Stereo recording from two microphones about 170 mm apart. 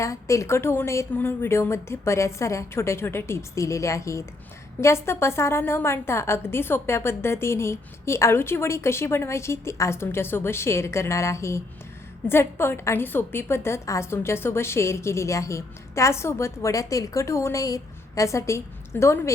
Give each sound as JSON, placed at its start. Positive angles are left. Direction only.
{"t": 0.0, "sound": "a woman's voice", "side_deg": 20}